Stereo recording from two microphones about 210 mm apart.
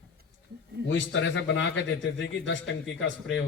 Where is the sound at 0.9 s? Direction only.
60° left (ahead or behind).